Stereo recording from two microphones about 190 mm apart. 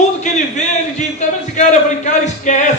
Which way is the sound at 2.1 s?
40° left (ahead or behind).